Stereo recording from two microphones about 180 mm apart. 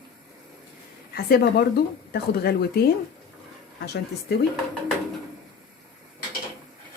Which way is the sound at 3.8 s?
65° left (ahead or behind).